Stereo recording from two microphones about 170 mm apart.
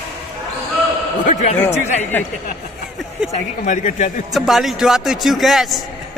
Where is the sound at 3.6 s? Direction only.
50° left (ahead or behind).